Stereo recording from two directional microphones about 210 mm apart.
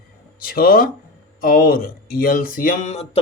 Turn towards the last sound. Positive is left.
turn(degrees=30)  # may be behind; listen again after turning